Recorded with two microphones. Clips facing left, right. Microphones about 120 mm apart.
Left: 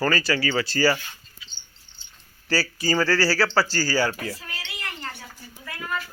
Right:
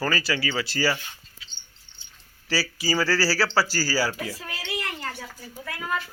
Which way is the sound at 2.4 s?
Centre (ahead or behind).